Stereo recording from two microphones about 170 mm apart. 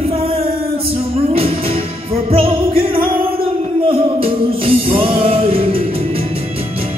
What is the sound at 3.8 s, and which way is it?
Music, 30° right (ahead or behind).